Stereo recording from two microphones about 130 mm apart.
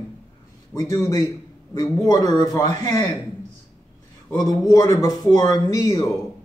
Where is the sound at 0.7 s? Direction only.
25° left (ahead or behind).